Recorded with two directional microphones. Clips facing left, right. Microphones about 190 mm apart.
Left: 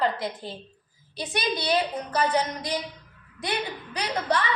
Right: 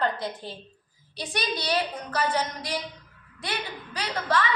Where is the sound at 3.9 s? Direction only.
20° left (ahead or behind).